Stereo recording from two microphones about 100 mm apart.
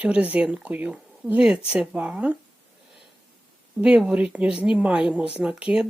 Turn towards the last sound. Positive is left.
turn(degrees=-10)  # may be behind; listen again after turning